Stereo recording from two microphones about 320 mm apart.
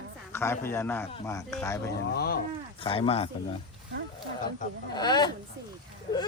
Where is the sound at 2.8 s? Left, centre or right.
Centre.